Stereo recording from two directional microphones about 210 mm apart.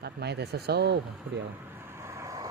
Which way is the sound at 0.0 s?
50° right (ahead or behind).